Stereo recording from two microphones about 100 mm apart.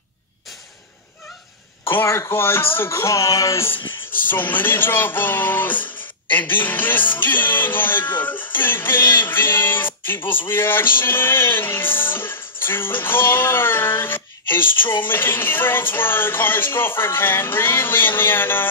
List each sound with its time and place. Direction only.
1.9 s music: 25° left (ahead or behind)